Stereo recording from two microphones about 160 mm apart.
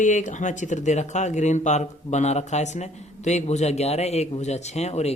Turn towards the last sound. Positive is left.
turn(degrees=45)  # may be behind; listen again after turning